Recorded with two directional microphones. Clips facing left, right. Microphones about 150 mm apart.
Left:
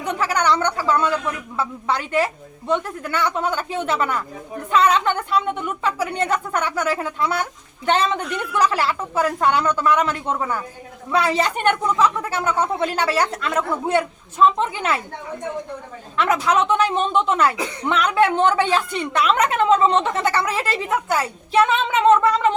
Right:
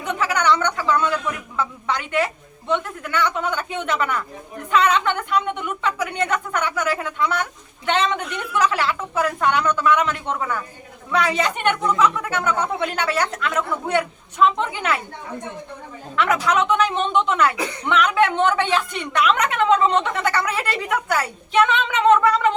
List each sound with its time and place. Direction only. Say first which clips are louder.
0.0 s speech: even; 35° left (ahead or behind)
16.1 s speech: left 1 dB; 30° left (ahead or behind)